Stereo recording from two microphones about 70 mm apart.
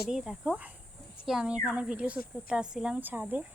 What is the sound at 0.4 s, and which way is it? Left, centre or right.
A woman's voice, right.